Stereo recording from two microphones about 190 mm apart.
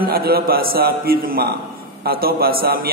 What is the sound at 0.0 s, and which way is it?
A man's voice, 55° right (ahead or behind).